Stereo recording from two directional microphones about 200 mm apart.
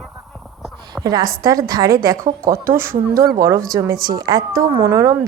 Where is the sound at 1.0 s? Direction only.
20° right (ahead or behind).